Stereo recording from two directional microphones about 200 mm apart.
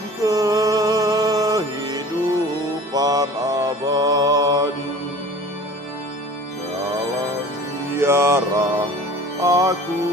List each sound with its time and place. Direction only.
0.2 s music: 20° right (ahead or behind)
7.9 s music: 10° right (ahead or behind)